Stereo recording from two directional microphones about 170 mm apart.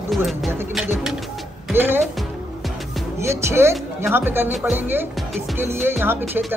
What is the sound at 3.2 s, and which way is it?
Music, 15° right (ahead or behind).